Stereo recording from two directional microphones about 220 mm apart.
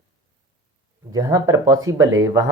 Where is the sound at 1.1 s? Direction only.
15° right (ahead or behind).